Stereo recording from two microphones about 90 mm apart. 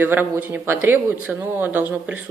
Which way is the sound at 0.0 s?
25° right (ahead or behind).